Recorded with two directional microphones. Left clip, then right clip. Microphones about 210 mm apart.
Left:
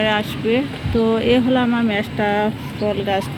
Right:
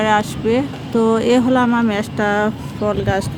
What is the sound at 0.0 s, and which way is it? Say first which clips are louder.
Speech: right 3 dB; 10° right (ahead or behind).